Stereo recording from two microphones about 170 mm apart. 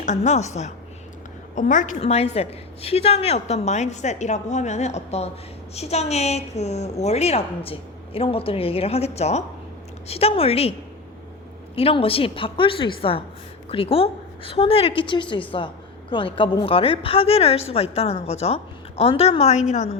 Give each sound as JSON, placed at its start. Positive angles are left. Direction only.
{"t": 0.0, "sound": "a woman's voice", "side_deg": 45}